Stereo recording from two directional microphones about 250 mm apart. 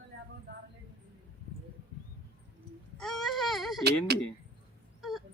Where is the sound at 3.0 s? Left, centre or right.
Centre.